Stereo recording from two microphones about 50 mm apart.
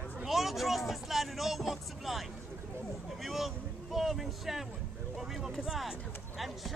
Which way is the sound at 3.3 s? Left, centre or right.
Centre.